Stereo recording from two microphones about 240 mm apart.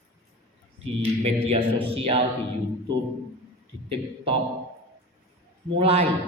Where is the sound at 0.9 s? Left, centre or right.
Right.